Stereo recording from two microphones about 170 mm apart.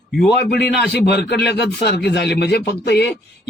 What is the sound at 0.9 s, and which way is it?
A man's voice, 75° left (ahead or behind).